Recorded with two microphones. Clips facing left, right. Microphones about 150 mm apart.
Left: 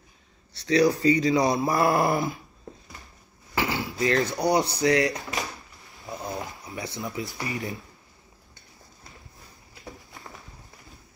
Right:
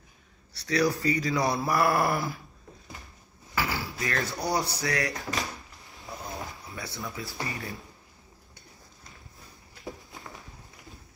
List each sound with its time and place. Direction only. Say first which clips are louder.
0.5 s speech: left 5 dB; 20° left (ahead or behind)
3.5 s speech: left 4 dB; 20° left (ahead or behind)